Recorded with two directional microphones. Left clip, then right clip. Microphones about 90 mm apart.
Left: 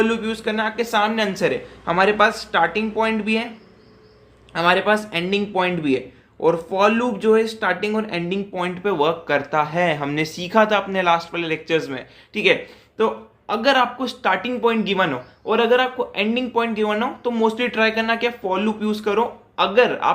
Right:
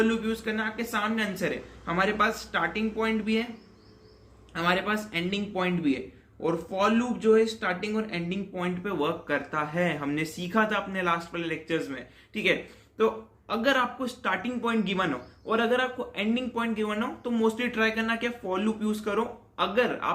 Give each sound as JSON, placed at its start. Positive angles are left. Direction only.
{"t": 0.0, "sound": "speech", "side_deg": 35}
{"t": 4.5, "sound": "speech", "side_deg": 40}
{"t": 14.6, "sound": "a man's voice", "side_deg": 10}